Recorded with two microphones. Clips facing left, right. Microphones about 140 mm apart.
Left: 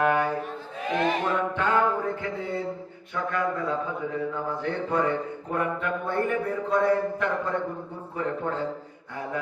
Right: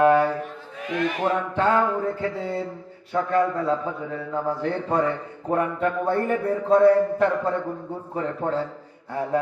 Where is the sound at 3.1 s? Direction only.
40° right (ahead or behind).